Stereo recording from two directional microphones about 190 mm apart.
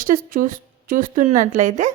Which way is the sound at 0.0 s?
45° right (ahead or behind).